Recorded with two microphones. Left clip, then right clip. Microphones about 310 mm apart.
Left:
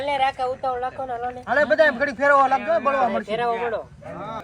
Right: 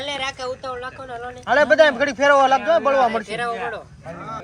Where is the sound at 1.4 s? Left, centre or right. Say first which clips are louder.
Right 4 dB; centre.